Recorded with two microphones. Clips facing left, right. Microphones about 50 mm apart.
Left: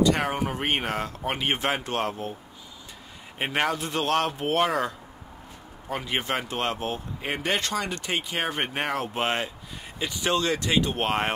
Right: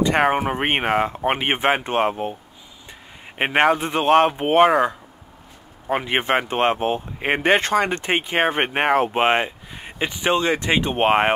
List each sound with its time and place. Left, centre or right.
0.0 s speech: right
3.3 s speech: right